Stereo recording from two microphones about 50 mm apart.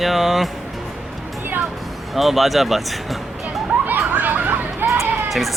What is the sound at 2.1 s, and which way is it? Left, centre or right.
Speech, centre.